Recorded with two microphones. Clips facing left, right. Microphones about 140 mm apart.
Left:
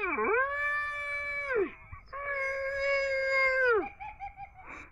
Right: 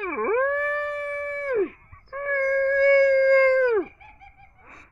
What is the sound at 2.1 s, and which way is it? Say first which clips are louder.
Howl: right 12 dB; 40° right (ahead or behind).